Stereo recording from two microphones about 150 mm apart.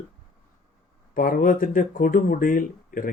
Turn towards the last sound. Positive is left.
turn(degrees=65)  # may be behind; listen again after turning